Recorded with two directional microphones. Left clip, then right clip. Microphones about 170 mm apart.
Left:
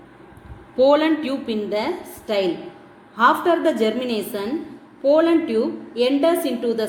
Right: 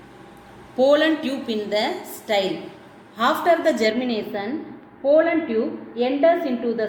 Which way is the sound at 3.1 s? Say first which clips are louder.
Left 2 dB; 50° left (ahead or behind).